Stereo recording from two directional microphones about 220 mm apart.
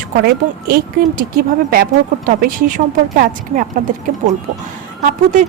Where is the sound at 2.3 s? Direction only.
40° right (ahead or behind).